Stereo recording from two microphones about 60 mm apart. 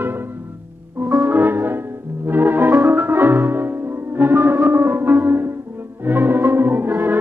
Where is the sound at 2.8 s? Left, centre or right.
Right.